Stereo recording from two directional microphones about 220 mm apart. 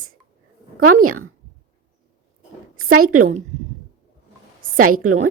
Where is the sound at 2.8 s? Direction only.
75° right (ahead or behind).